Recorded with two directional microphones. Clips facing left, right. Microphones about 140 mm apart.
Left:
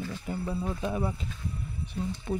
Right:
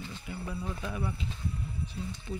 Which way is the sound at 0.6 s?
30° left (ahead or behind).